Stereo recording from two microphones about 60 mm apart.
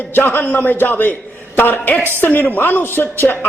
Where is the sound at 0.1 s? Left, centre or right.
Left.